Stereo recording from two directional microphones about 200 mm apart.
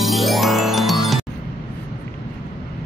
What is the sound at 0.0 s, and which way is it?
Music, centre (ahead or behind).